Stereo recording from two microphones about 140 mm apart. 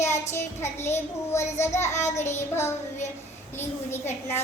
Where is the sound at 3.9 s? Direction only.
15° left (ahead or behind).